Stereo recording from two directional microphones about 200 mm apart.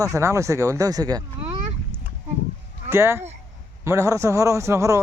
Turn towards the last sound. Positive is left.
turn(degrees=-15)  # may be behind; listen again after turning